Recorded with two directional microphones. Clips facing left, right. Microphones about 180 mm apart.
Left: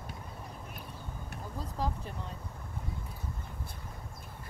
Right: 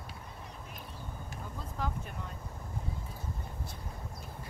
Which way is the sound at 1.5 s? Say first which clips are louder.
Left 3 dB; 35° left (ahead or behind).